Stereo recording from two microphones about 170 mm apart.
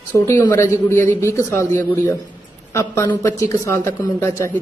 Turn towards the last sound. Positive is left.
turn(degrees=15)  # may be behind; listen again after turning